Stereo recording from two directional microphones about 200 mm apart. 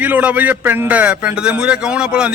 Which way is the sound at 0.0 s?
5° right (ahead or behind).